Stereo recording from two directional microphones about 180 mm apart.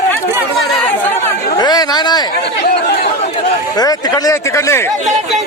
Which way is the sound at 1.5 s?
20° left (ahead or behind).